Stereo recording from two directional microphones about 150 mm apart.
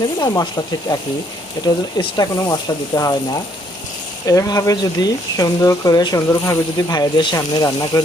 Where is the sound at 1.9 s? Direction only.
30° left (ahead or behind).